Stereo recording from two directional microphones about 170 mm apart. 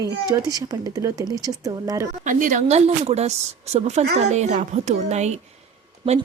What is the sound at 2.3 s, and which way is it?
Speech, 50° right (ahead or behind).